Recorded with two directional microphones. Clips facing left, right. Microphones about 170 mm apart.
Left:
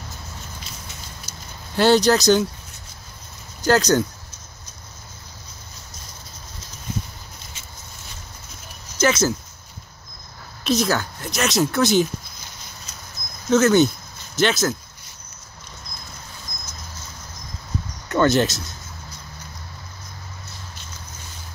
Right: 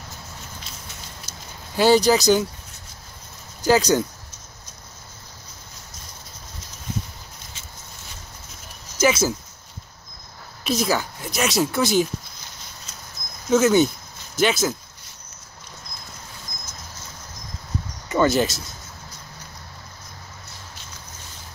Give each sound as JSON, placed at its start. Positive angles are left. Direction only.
{"t": 1.3, "sound": "a sound", "side_deg": -15}
{"t": 1.8, "sound": "speech", "side_deg": -5}
{"t": 3.6, "sound": "speech", "side_deg": -5}
{"t": 9.0, "sound": "speech", "side_deg": -10}
{"t": 10.6, "sound": "speech", "side_deg": -5}
{"t": 13.5, "sound": "speech", "side_deg": -10}
{"t": 18.0, "sound": "speech", "side_deg": -5}